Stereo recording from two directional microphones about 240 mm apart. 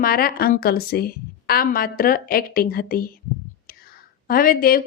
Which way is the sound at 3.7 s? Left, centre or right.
Left.